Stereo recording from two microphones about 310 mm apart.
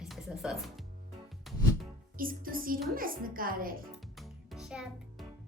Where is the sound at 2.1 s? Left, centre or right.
Right.